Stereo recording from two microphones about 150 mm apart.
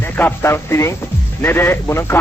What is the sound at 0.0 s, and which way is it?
Speech, 15° left (ahead or behind).